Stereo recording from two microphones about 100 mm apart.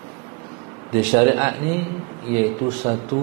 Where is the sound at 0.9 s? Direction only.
20° right (ahead or behind).